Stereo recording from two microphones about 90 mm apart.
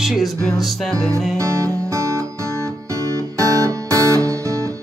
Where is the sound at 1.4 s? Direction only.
35° right (ahead or behind).